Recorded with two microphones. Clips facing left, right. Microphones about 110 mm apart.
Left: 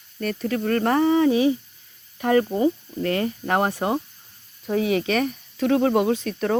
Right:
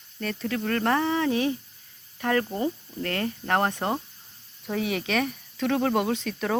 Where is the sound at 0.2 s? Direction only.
5° left (ahead or behind).